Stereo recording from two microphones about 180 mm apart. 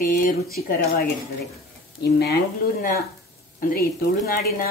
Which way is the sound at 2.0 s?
65° left (ahead or behind).